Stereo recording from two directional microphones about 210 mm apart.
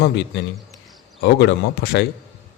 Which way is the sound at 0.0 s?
55° left (ahead or behind).